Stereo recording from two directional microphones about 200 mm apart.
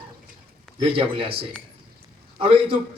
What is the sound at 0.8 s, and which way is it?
A man's voice, 25° right (ahead or behind).